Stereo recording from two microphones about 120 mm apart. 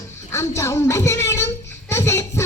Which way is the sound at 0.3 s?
25° left (ahead or behind).